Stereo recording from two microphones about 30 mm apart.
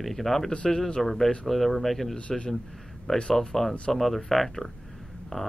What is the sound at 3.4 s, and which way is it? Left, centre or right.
Speech, centre.